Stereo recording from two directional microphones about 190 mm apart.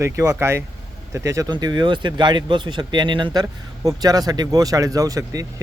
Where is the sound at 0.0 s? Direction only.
15° right (ahead or behind).